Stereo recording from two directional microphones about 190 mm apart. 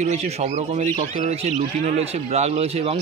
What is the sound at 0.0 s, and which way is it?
A man's voice, 35° right (ahead or behind).